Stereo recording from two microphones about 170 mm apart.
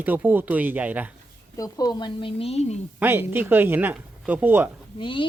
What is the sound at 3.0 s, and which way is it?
Speech, 10° right (ahead or behind).